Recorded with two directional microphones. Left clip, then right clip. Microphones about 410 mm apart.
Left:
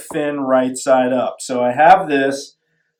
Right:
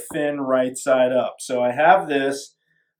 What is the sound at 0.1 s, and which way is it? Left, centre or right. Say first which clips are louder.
Speech: left 4 dB; centre.